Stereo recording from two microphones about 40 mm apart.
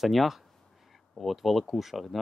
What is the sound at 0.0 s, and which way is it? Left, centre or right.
Speech, centre.